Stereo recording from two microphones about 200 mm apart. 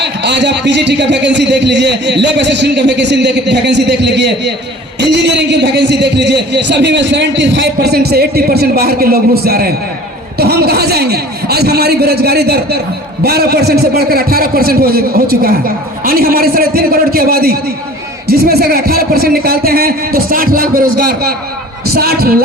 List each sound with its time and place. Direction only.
0.0 s a man's voice: 60° right (ahead or behind)